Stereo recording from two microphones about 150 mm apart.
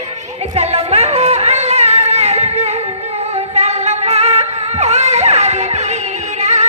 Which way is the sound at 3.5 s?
45° right (ahead or behind).